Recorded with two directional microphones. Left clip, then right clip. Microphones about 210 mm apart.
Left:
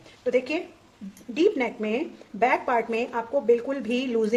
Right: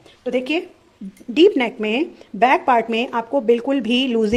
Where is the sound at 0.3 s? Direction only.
45° right (ahead or behind).